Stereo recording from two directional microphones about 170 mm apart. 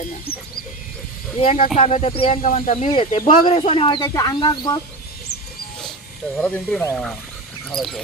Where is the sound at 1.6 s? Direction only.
55° left (ahead or behind).